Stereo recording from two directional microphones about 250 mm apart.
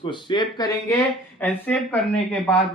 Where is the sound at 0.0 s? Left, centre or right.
Centre.